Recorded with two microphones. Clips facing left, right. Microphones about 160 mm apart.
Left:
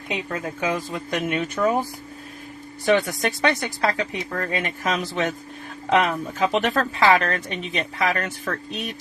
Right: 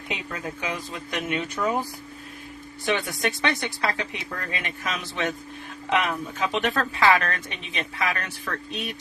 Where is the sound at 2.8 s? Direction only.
40° left (ahead or behind).